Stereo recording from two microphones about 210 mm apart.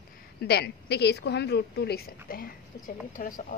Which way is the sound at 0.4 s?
50° left (ahead or behind).